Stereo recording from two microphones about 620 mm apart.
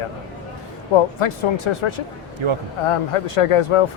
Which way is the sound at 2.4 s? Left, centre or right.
Right.